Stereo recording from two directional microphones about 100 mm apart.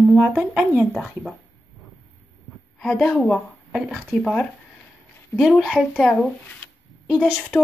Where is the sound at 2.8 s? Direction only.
10° left (ahead or behind).